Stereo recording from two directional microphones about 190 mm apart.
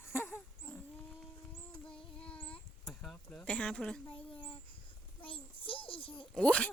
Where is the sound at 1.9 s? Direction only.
5° left (ahead or behind).